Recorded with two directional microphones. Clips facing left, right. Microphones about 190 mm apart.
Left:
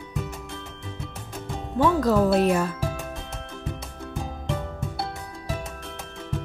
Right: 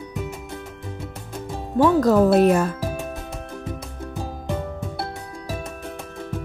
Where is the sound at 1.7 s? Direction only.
50° right (ahead or behind).